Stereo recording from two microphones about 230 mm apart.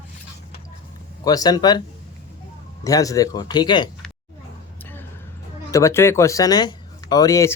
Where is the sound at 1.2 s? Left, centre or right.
Centre.